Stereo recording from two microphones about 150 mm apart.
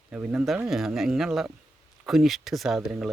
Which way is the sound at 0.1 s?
10° right (ahead or behind).